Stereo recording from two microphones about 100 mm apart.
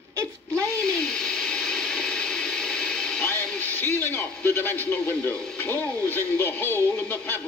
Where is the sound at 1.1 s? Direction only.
10° left (ahead or behind).